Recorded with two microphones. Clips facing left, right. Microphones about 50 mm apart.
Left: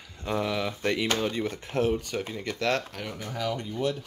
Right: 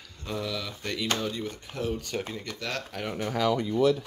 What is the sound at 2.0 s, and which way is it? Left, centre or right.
Speech, centre.